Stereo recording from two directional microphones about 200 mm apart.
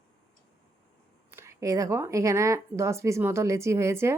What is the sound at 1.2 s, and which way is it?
Speech, 15° right (ahead or behind).